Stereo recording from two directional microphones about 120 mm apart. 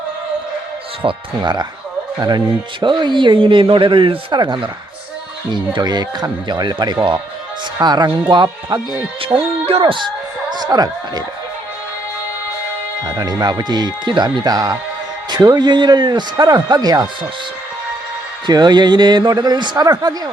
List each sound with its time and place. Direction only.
1.0 s a man's voice: 40° right (ahead or behind)
2.8 s a man's voice: 40° right (ahead or behind)
9.6 s speech: 50° right (ahead or behind); by 11.2 s 35° right (ahead or behind)
13.1 s a man's voice: 35° right (ahead or behind)
18.4 s a man's voice: 35° right (ahead or behind)